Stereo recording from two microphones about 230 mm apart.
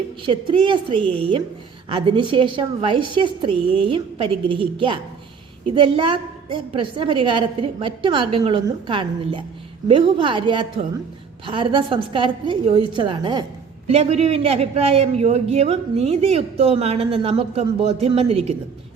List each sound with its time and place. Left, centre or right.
0.2 s a man's voice: right